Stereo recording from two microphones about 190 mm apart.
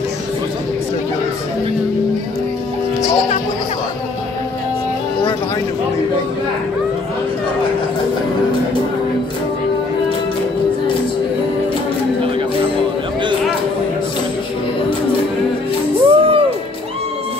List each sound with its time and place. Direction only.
16.1 s music: 30° right (ahead or behind)